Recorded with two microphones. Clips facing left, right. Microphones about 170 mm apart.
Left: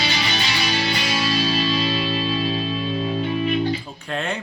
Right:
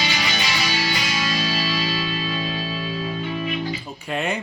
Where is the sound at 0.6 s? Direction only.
30° left (ahead or behind).